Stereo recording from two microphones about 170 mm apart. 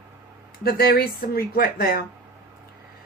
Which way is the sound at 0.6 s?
65° left (ahead or behind).